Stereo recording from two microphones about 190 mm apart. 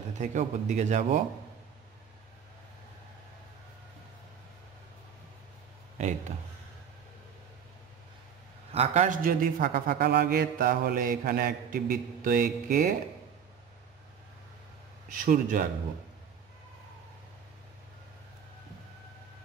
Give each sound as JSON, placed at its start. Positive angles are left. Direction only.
{"t": 0.2, "sound": "speech", "side_deg": -40}
{"t": 5.9, "sound": "speech", "side_deg": -40}
{"t": 8.7, "sound": "a man's voice", "side_deg": -40}
{"t": 15.0, "sound": "a man's voice", "side_deg": -45}